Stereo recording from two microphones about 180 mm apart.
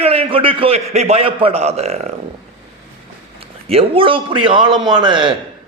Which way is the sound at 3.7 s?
30° right (ahead or behind).